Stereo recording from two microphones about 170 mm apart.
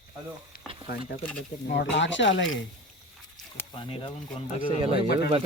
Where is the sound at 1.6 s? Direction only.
90° left.